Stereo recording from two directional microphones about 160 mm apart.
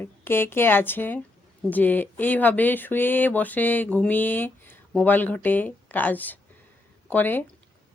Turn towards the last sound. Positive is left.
turn(degrees=10)  # may be behind; listen again after turning